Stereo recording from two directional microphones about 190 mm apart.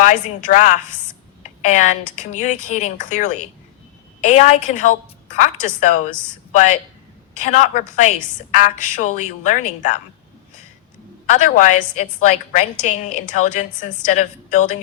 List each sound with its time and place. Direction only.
0.0 s a woman's voice: 40° left (ahead or behind)
7.3 s a woman's voice: 40° left (ahead or behind)
11.3 s a woman's voice: 40° left (ahead or behind)